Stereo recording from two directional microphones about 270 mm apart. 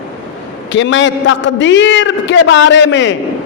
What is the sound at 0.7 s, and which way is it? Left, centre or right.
A man's voice, left.